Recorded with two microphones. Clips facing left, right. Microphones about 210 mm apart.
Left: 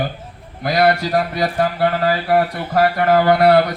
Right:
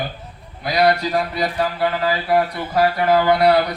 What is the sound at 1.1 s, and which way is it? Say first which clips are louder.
Speech: left 2 dB; 45° left (ahead or behind).